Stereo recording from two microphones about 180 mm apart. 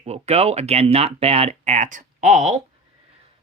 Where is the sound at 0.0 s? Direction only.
35° right (ahead or behind).